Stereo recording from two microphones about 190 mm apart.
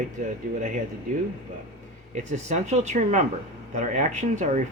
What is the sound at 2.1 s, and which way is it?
Speech, 40° right (ahead or behind).